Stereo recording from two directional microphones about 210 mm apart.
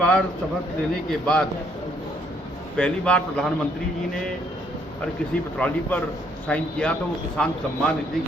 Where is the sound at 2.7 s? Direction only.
5° left (ahead or behind).